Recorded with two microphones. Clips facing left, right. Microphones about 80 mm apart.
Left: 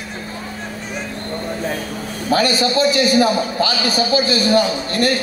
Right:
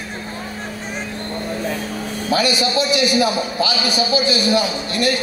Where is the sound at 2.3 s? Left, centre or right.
Left.